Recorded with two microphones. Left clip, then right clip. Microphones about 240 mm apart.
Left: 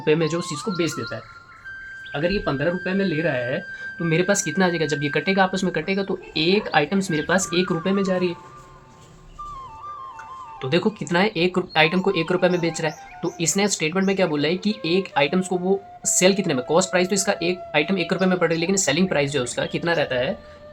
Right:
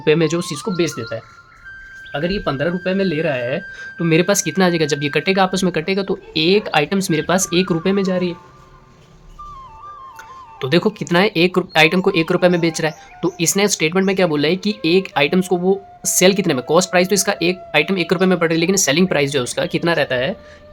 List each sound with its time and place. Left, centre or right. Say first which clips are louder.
0.0 s speech: right 5 dB; right
0.9 s speech: right 4 dB; centre
2.2 s speech: right 2 dB; right
10.6 s speech: right 5 dB; right